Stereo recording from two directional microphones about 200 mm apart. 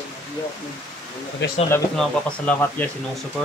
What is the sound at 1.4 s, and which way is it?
Speech, 60° left (ahead or behind).